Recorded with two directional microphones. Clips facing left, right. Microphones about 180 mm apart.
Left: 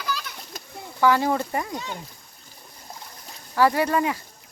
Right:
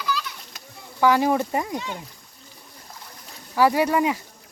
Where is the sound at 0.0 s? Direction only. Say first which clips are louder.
Right 3 dB; 50° left (ahead or behind).